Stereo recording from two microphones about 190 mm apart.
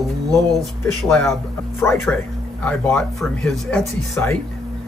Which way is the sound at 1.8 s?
10° left (ahead or behind).